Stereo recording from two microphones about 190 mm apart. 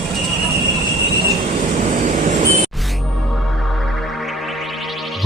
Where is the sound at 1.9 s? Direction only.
40° right (ahead or behind).